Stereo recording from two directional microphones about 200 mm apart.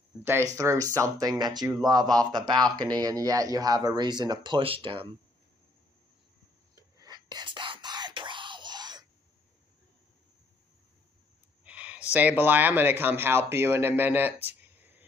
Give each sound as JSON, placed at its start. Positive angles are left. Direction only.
{"t": 0.2, "sound": "speech", "side_deg": -10}
{"t": 6.7, "sound": "whispering", "side_deg": -20}
{"t": 11.6, "sound": "speech", "side_deg": -5}